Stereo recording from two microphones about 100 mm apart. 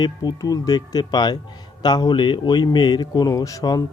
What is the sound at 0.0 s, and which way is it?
A man's voice, 45° left (ahead or behind).